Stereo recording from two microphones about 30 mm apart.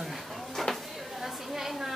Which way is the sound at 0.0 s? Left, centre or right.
Centre.